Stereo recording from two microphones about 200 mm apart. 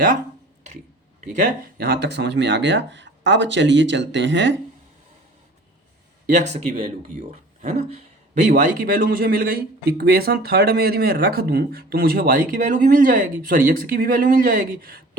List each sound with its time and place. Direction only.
1.4 s speech: 40° right (ahead or behind)
2.0 s speech: 60° right (ahead or behind)
6.2 s speech: 40° right (ahead or behind)